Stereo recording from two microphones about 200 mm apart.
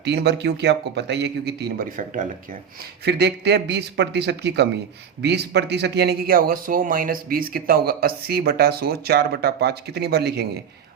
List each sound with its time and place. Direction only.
0.0 s speech: 55° right (ahead or behind)